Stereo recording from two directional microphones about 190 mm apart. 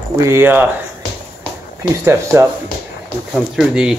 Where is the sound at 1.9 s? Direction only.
15° right (ahead or behind).